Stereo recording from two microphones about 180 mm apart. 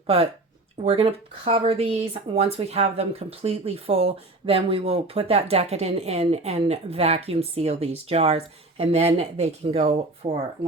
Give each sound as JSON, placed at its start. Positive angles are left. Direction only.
{"t": 0.9, "sound": "speech", "side_deg": -30}